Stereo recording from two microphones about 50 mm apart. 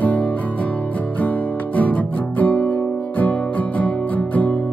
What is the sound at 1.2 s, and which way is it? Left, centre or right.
Guitar, left.